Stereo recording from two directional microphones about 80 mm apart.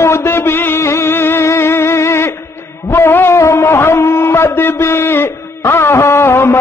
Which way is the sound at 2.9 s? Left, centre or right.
Left.